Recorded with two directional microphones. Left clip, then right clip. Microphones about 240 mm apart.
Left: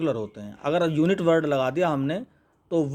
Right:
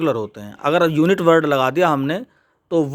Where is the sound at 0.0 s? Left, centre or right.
Right.